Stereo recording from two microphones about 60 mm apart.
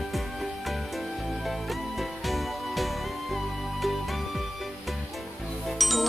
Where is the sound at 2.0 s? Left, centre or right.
Centre.